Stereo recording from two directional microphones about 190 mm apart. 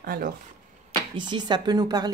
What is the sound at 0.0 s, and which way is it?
Speech, 50° right (ahead or behind).